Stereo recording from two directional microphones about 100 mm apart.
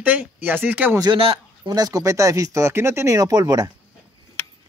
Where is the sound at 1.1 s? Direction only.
65° right (ahead or behind).